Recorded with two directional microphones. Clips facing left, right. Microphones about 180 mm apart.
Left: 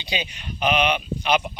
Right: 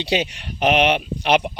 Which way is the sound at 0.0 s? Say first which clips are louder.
Right 8 dB; 75° right (ahead or behind).